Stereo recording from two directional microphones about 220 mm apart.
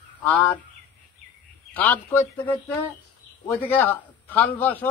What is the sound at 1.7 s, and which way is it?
Speech, 10° left (ahead or behind).